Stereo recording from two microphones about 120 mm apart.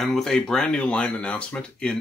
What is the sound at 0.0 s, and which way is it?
Speech, centre (ahead or behind).